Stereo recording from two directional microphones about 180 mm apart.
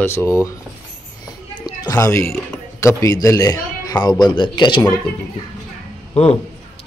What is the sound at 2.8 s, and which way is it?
A man's voice, 15° left (ahead or behind).